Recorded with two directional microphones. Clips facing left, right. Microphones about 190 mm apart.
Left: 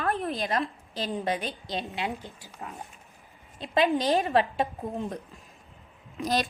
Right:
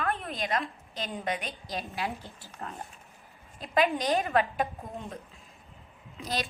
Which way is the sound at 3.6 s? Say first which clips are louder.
Left 2 dB; 25° left (ahead or behind).